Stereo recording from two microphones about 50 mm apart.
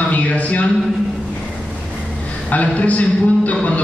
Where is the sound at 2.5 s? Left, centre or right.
Left.